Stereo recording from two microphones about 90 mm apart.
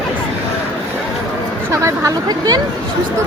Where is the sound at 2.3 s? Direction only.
45° right (ahead or behind).